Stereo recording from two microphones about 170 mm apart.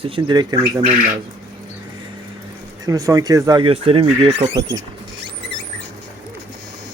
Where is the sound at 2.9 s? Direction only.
20° right (ahead or behind).